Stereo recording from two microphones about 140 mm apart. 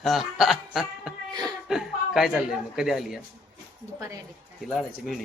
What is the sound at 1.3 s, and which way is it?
Chuckle, 30° right (ahead or behind).